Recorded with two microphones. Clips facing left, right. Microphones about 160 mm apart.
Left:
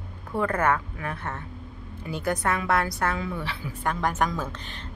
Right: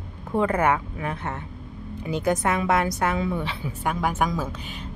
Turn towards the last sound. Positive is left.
turn(degrees=-10)  # may be behind; listen again after turning